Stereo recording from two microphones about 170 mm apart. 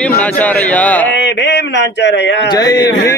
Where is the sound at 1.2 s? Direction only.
85° left.